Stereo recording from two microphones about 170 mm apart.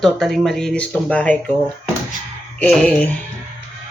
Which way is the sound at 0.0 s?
Centre (ahead or behind).